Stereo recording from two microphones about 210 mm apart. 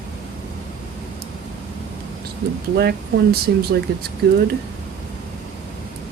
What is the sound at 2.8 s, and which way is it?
Speech, 50° right (ahead or behind).